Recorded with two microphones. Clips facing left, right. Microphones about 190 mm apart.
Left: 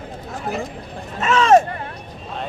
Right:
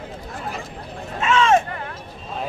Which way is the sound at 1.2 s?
40° left (ahead or behind).